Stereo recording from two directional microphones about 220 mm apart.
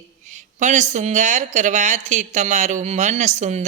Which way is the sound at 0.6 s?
35° right (ahead or behind).